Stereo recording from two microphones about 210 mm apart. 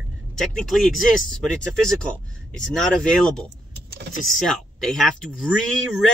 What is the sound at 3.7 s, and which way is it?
Vehicle, 50° right (ahead or behind).